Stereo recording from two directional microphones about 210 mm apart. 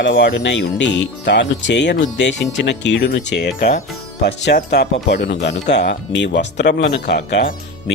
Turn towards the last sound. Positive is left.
turn(degrees=50)  # may be behind; listen again after turning